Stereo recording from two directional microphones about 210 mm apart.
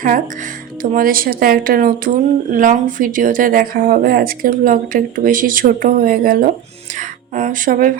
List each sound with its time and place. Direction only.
0.8 s speech: 45° right (ahead or behind)